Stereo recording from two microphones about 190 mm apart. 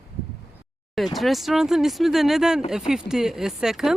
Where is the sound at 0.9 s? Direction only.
Centre (ahead or behind).